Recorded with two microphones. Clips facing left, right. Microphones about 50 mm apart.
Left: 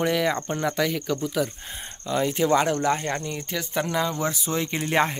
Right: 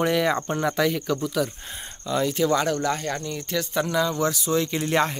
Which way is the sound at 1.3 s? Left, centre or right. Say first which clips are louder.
Even; centre.